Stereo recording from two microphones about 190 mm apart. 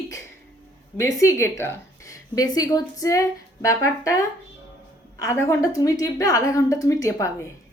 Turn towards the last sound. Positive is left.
turn(degrees=15)  # may be behind; listen again after turning